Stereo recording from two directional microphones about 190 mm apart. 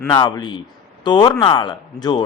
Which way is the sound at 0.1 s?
20° left (ahead or behind).